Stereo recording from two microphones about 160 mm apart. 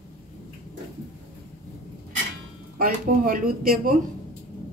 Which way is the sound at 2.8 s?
60° right (ahead or behind).